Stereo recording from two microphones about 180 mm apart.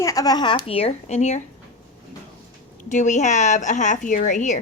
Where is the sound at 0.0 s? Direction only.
20° left (ahead or behind); by 1.4 s 40° left (ahead or behind).